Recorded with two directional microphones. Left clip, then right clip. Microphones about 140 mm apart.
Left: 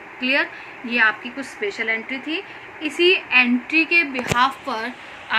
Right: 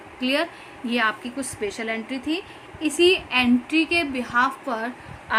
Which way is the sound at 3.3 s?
90° right.